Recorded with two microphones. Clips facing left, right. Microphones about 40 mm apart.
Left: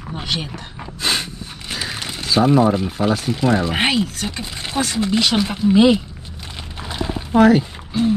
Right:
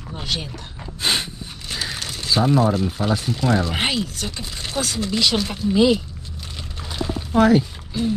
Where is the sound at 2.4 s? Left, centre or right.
Left.